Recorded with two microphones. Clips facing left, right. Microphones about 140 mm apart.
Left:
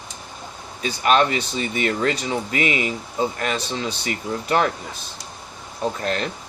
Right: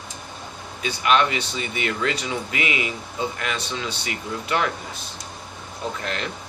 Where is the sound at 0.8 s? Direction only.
40° left (ahead or behind).